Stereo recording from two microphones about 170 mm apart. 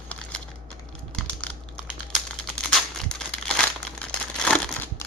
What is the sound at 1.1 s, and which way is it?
Computer keyboard, 5° left (ahead or behind).